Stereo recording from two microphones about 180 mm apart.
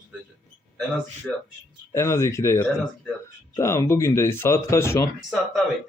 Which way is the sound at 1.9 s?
15° left (ahead or behind).